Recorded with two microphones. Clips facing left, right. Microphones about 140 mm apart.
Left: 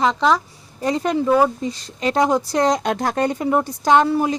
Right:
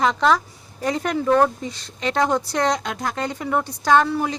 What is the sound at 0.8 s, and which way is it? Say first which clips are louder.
Speech: left 3 dB; 30° left (ahead or behind).